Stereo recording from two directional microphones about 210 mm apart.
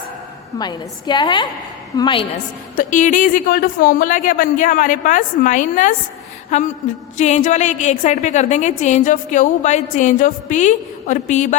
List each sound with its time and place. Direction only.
0.6 s a woman's voice: 20° left (ahead or behind)
2.7 s a woman's voice: 40° left (ahead or behind)